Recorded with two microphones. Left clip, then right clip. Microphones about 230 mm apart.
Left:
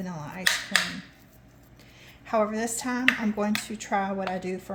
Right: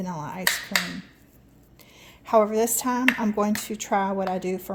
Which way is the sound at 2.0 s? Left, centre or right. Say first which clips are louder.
Right 6 dB; right.